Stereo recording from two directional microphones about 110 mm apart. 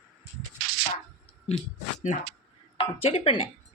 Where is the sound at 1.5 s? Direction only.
80° left.